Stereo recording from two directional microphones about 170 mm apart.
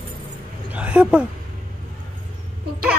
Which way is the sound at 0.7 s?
10° right (ahead or behind).